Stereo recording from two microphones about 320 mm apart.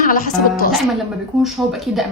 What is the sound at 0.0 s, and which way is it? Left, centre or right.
Speech, left.